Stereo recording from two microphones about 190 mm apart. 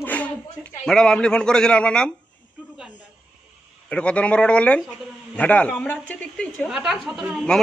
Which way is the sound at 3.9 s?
5° left (ahead or behind).